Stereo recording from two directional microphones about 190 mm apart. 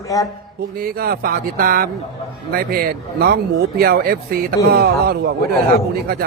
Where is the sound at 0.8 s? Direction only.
50° right (ahead or behind).